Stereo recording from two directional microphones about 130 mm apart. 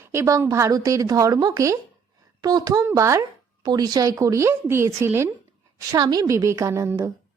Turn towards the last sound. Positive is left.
turn(degrees=-20)  # may be behind; listen again after turning